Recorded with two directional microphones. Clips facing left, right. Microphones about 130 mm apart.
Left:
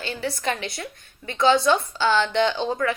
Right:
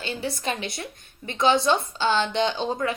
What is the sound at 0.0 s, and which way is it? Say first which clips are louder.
A woman's voice: left 2 dB; 25° right (ahead or behind).